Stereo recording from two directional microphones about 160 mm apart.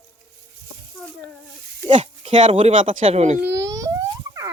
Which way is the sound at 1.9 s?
50° right (ahead or behind).